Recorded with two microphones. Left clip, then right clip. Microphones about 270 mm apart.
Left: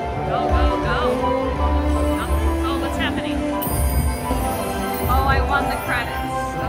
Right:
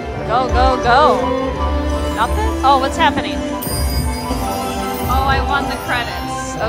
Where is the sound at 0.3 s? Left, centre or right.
Centre.